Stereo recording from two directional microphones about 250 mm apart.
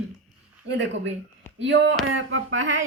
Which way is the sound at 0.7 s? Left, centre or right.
Right.